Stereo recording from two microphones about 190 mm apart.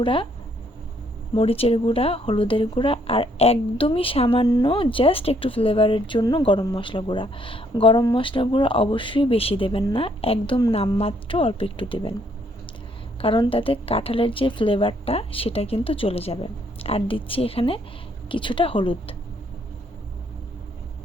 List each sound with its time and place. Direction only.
0.0 s speech: 25° left (ahead or behind)
1.4 s speech: 30° left (ahead or behind)
13.2 s speech: 30° left (ahead or behind)